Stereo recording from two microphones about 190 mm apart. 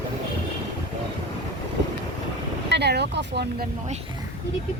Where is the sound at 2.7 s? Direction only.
60° right (ahead or behind).